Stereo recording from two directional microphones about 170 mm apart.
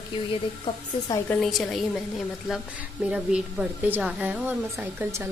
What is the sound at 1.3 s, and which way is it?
A woman's voice, centre (ahead or behind).